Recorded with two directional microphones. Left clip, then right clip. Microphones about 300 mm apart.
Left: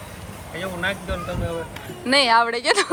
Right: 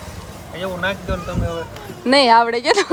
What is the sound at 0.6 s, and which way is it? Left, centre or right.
Speech, centre.